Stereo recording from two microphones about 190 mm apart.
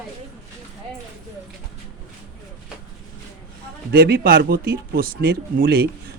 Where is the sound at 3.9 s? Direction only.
55° right (ahead or behind).